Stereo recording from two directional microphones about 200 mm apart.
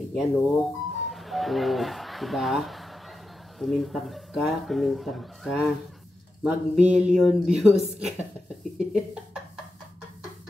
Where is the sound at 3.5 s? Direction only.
Centre (ahead or behind).